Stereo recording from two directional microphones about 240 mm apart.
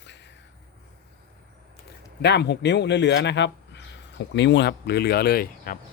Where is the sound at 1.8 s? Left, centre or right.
Left.